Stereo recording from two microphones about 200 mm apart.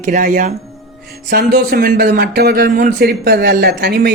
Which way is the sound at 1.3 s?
50° right (ahead or behind).